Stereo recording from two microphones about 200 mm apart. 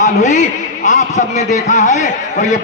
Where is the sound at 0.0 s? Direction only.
35° left (ahead or behind).